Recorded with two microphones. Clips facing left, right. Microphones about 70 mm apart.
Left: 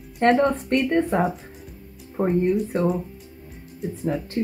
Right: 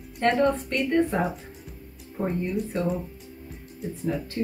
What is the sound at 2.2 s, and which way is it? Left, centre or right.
Speech, left.